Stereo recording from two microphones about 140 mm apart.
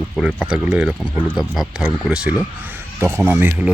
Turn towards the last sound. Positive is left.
turn(degrees=-20)  # may be behind; listen again after turning